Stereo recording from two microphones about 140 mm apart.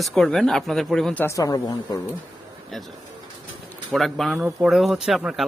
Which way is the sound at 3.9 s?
Centre (ahead or behind).